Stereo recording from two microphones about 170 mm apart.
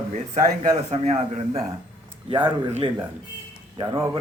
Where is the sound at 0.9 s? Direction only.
40° right (ahead or behind).